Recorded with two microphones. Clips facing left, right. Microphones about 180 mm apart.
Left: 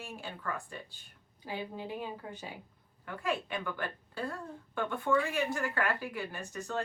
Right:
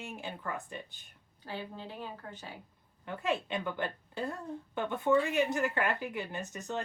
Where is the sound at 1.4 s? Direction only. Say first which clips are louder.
Left 3 dB; 15° left (ahead or behind).